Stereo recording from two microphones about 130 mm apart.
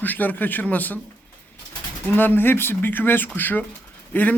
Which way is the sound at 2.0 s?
15° left (ahead or behind).